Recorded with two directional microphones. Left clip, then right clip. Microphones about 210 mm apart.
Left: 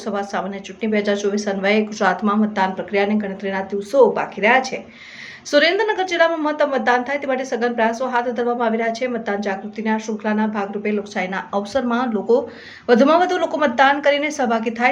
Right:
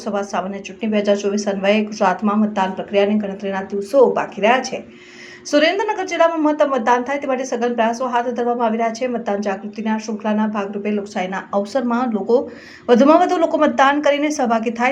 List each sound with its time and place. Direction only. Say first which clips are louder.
0.0 s a woman's voice: right 2 dB; centre (ahead or behind)